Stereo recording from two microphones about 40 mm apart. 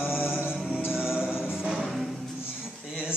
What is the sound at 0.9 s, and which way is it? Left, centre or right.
Music, centre.